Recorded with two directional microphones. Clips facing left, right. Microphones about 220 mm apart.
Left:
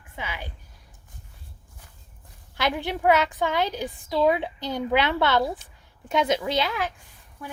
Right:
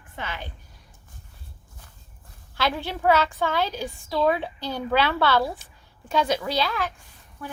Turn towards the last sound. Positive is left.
turn(degrees=15)  # may be behind; listen again after turning